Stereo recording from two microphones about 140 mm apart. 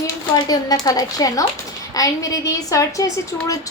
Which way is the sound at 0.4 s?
25° left (ahead or behind).